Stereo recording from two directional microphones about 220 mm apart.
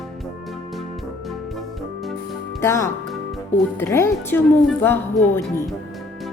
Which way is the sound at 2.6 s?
10° left (ahead or behind).